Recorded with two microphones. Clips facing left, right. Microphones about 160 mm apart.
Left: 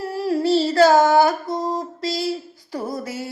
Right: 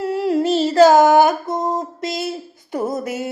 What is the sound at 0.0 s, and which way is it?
Humming, 20° right (ahead or behind).